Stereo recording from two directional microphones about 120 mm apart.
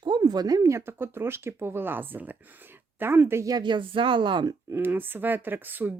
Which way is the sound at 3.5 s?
40° right (ahead or behind).